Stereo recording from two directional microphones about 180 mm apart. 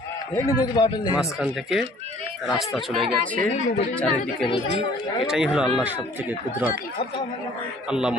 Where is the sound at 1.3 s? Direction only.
Centre (ahead or behind).